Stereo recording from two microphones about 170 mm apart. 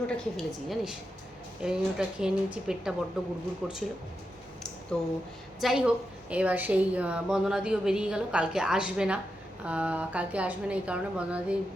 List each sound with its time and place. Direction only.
0.3 s a woman's voice: centre (ahead or behind)
4.9 s a woman's voice: 5° left (ahead or behind)